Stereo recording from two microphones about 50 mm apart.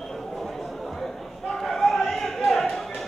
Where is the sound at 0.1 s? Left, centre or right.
Centre.